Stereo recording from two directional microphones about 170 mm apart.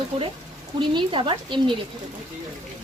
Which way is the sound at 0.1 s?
35° right (ahead or behind).